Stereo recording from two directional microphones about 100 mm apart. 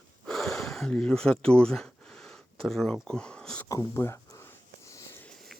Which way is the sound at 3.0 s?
10° left (ahead or behind).